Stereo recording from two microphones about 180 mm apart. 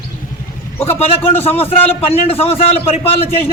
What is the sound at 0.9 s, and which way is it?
A man's voice, 35° left (ahead or behind).